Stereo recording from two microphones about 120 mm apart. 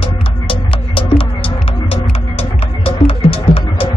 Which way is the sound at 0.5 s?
50° left (ahead or behind).